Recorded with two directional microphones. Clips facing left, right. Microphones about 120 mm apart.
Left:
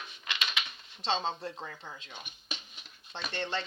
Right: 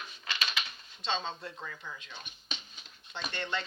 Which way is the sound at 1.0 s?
30° left (ahead or behind).